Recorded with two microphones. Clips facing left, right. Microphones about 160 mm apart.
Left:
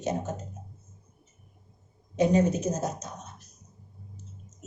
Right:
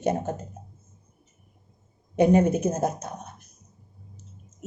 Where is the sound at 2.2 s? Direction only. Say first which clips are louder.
Right 4 dB; 55° right (ahead or behind).